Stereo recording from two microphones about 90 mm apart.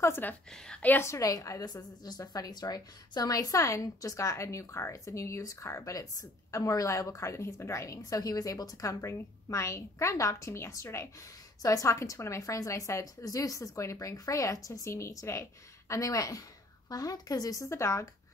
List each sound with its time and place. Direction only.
0.0 s a woman's voice: 25° left (ahead or behind)
0.5 s a woman's voice: 5° left (ahead or behind)
0.8 s a woman's voice: 30° left (ahead or behind)